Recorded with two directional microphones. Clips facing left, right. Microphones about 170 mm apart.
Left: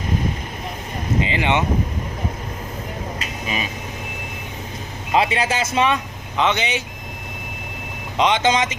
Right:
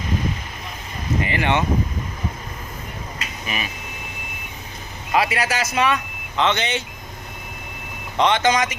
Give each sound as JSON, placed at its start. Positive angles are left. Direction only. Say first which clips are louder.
{"t": 1.2, "sound": "speech", "louder": "left 1 dB", "side_deg": 20}
{"t": 3.4, "sound": "a sound", "louder": "left 2 dB", "side_deg": 25}
{"t": 5.1, "sound": "speech", "louder": "left 2 dB", "side_deg": 25}
{"t": 8.2, "sound": "speech", "louder": "even", "side_deg": 15}